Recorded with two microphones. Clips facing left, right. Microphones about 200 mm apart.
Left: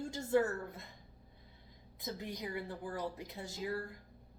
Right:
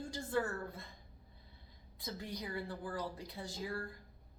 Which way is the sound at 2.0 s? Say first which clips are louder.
Left 2 dB; 20° left (ahead or behind).